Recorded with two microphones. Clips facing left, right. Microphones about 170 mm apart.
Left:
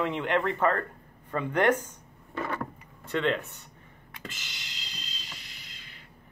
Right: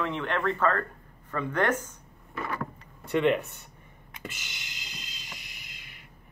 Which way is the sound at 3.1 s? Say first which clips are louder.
Right 4 dB; 15° right (ahead or behind).